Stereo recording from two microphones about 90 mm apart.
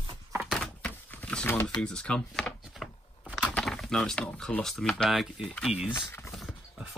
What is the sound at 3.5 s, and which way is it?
Speech, 5° left (ahead or behind).